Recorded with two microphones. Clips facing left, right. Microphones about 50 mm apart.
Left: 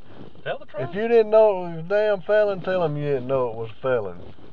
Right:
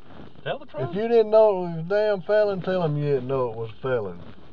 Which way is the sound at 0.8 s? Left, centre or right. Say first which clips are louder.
Left 1 dB; left.